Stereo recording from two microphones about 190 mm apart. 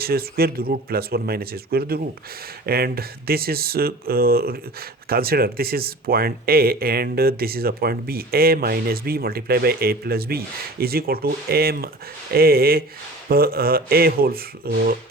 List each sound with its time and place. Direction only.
0.0 s speech: 55° right (ahead or behind)